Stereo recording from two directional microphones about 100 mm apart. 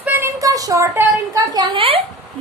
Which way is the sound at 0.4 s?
35° right (ahead or behind).